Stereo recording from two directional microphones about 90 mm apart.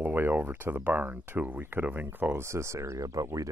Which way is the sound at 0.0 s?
20° right (ahead or behind).